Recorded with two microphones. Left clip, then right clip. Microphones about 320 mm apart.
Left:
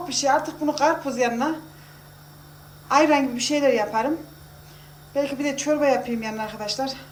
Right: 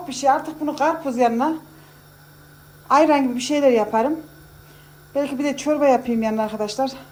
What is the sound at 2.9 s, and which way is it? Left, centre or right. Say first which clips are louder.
A man's voice: right 3 dB; centre.